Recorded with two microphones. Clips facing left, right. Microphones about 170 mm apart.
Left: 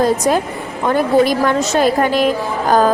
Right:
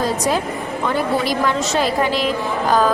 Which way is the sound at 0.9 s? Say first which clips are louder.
Left 7 dB; 50° left (ahead or behind).